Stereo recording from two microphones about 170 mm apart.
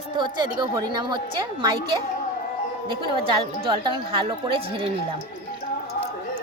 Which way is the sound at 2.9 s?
25° right (ahead or behind).